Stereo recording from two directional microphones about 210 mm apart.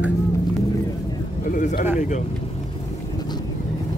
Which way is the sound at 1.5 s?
35° left (ahead or behind).